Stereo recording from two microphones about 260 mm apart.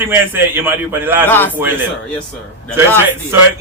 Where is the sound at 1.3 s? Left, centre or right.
Centre.